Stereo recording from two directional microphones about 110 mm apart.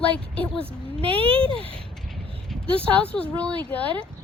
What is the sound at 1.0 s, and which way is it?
Speech, 60° right (ahead or behind).